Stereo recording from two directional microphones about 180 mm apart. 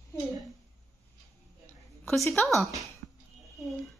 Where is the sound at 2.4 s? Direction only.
5° left (ahead or behind).